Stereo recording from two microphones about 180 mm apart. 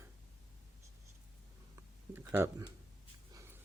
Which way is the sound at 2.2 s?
15° right (ahead or behind).